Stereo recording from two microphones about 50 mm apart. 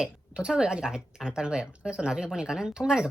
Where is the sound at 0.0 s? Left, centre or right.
Centre.